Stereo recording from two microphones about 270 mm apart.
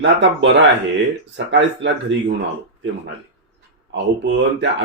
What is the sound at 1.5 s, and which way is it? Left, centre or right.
Speech, right.